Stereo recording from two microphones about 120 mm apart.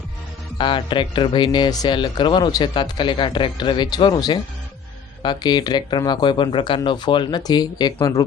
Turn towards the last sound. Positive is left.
turn(degrees=35)  # may be behind; listen again after turning